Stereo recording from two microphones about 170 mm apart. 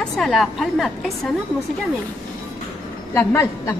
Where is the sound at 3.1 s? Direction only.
15° left (ahead or behind).